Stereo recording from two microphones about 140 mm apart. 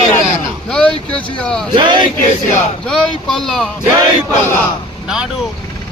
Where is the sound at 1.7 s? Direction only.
35° right (ahead or behind).